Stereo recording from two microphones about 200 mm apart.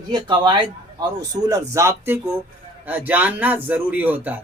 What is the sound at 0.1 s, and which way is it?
A man's voice, 20° right (ahead or behind).